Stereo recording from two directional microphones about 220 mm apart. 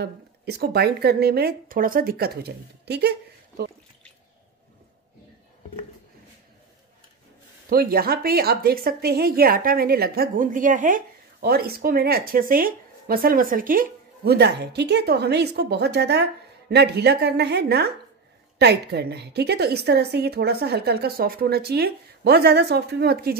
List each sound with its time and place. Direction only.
0.0 s a woman's voice: 45° right (ahead or behind)
7.7 s a woman's voice: 45° right (ahead or behind)